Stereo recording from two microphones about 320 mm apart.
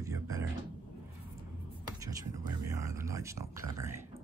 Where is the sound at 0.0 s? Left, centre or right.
Centre.